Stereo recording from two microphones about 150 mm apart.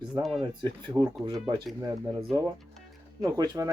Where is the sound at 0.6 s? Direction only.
25° right (ahead or behind).